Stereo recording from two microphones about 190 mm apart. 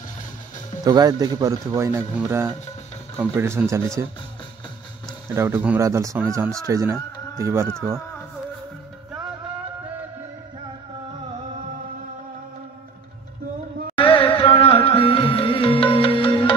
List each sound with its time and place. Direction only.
0.8 s speech: 20° right (ahead or behind)
5.3 s speech: 15° right (ahead or behind)
13.9 s music: 30° left (ahead or behind)